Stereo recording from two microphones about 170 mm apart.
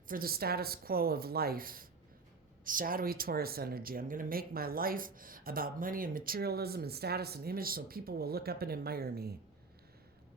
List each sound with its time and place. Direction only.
0.1 s speech: 60° right (ahead or behind)